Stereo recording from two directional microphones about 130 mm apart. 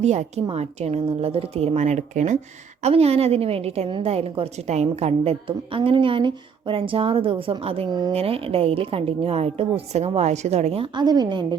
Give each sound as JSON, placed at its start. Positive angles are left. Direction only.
{"t": 0.0, "sound": "a woman's voice", "side_deg": -60}
{"t": 2.8, "sound": "a woman's voice", "side_deg": -50}
{"t": 7.9, "sound": "speech", "side_deg": -30}
{"t": 8.1, "sound": "a woman's voice", "side_deg": -45}